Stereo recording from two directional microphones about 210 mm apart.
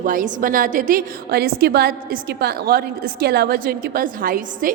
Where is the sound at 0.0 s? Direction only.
40° right (ahead or behind).